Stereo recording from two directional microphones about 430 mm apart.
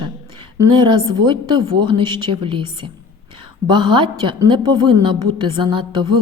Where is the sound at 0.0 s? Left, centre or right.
Centre.